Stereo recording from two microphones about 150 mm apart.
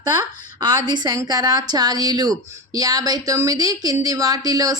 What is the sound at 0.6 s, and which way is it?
A woman's voice, 30° right (ahead or behind).